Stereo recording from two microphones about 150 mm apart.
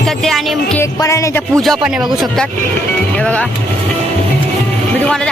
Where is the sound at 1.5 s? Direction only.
Centre (ahead or behind).